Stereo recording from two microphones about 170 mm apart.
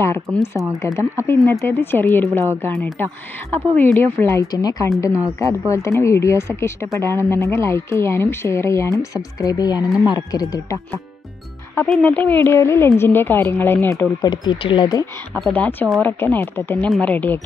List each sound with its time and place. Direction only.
0.0 s speech: 15° left (ahead or behind)
11.7 s speech: 5° left (ahead or behind)
14.2 s speech: 25° left (ahead or behind)
15.3 s speech: 5° left (ahead or behind)